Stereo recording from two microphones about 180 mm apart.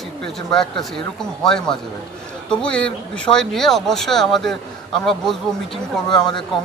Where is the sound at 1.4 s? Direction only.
5° left (ahead or behind).